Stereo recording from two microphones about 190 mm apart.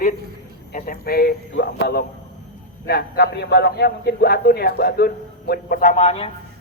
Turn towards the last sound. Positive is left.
turn(degrees=30)  # may be behind; listen again after turning